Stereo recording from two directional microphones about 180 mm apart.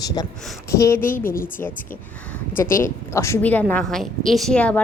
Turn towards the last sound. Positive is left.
turn(degrees=5)  # may be behind; listen again after turning